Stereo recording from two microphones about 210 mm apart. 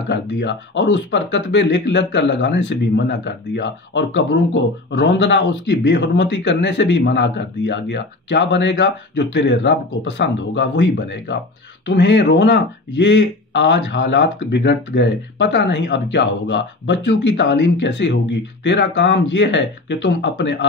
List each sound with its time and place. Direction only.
0.1 s speech: 55° left (ahead or behind)